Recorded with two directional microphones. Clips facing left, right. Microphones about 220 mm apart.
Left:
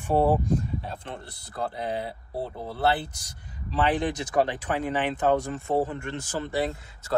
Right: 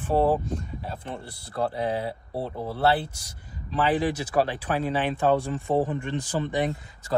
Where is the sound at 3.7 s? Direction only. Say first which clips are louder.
Right 1 dB; centre (ahead or behind).